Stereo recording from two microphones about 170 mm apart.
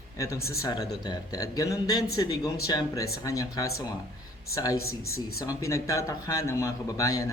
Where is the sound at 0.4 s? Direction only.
20° left (ahead or behind).